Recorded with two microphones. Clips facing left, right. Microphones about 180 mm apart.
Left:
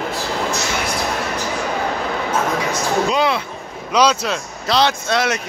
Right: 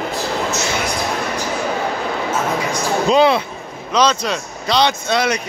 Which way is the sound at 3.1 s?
25° right (ahead or behind).